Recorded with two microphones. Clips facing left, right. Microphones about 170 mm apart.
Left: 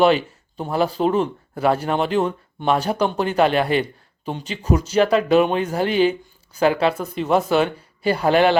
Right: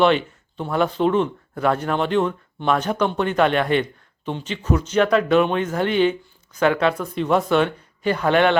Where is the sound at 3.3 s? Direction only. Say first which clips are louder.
Left 2 dB; 35° left (ahead or behind).